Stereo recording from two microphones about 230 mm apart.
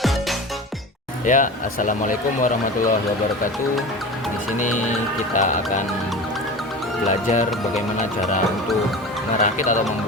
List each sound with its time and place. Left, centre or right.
1.2 s speech: left
5.3 s speech: left
7.1 s speech: left
9.4 s speech: left